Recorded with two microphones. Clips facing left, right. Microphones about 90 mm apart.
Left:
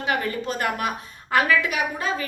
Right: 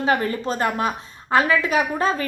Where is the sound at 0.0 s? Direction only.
35° right (ahead or behind).